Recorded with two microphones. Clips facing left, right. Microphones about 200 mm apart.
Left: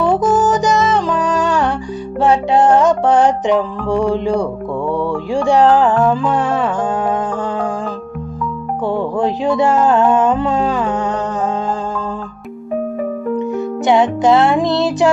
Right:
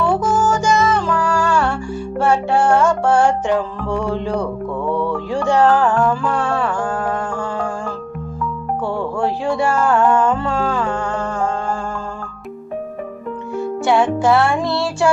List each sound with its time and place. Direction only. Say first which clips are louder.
0.0 s music: left 3 dB; 15° left (ahead or behind)
8.8 s music: left 4 dB; 20° left (ahead or behind)
13.5 s music: left 1 dB; 20° left (ahead or behind)